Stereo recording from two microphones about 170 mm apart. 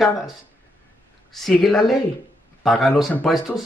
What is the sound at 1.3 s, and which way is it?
Speech, centre (ahead or behind).